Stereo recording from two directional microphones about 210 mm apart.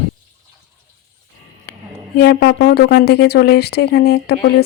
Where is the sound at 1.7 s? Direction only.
50° left (ahead or behind).